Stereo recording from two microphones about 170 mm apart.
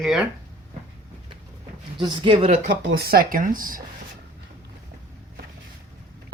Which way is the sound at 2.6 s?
70° right (ahead or behind).